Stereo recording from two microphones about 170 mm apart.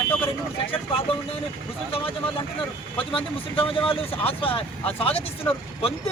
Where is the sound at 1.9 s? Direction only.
30° left (ahead or behind).